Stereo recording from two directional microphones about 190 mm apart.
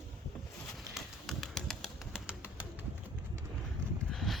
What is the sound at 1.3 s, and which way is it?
Bird, centre (ahead or behind).